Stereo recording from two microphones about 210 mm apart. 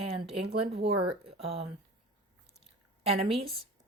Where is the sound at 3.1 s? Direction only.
30° right (ahead or behind).